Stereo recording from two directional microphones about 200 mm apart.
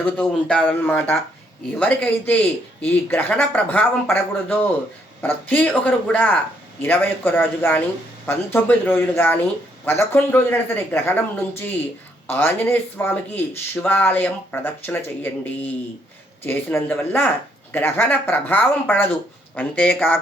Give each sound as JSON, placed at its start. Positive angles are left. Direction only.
{"t": 0.2, "sound": "speech", "side_deg": 5}